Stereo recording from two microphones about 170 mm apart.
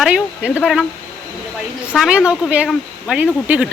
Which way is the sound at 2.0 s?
5° right (ahead or behind).